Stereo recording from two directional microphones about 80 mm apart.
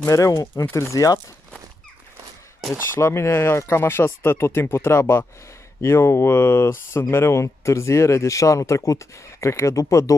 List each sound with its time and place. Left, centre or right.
0.0 s speech: left
3.0 s speech: left